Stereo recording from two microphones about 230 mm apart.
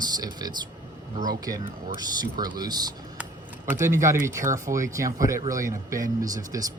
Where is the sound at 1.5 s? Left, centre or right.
Centre.